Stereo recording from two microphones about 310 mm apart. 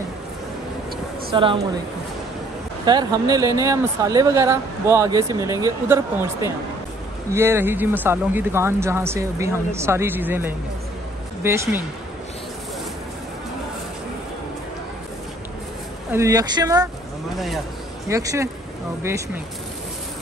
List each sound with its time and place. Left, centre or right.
1.3 s speech: centre
2.8 s speech: centre
16.1 s speech: centre
18.0 s speech: centre